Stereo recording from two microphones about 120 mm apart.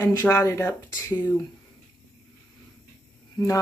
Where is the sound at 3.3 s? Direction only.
25° left (ahead or behind).